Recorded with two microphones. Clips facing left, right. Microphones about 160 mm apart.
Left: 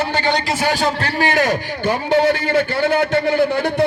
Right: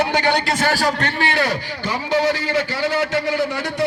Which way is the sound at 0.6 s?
20° left (ahead or behind).